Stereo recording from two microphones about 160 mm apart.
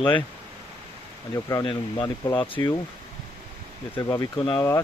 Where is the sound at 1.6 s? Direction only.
30° left (ahead or behind).